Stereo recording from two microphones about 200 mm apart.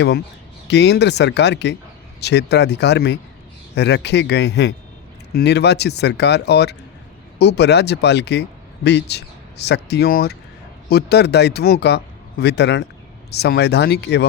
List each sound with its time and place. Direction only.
0.7 s speech: 60° left (ahead or behind)